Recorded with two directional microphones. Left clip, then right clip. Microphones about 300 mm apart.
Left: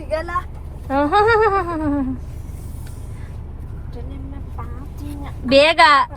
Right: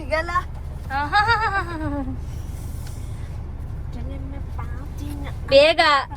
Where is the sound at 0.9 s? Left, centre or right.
Centre.